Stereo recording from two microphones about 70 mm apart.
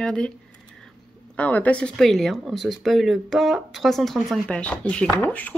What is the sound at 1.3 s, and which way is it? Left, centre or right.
Speech, centre.